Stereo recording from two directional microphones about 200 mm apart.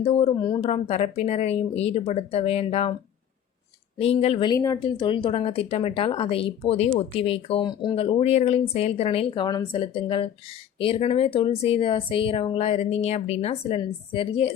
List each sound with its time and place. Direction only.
0.0 s speech: 30° left (ahead or behind)
3.9 s speech: 30° left (ahead or behind)